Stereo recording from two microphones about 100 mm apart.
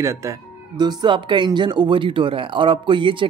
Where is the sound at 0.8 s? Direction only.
50° right (ahead or behind).